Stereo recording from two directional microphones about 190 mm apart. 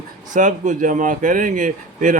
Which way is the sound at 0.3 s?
40° right (ahead or behind).